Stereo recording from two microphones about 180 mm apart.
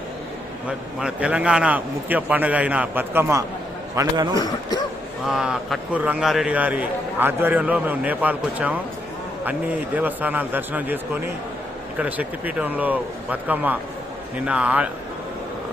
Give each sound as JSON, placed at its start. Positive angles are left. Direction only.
{"t": 0.9, "sound": "a man's voice", "side_deg": -5}
{"t": 5.2, "sound": "a man's voice", "side_deg": -5}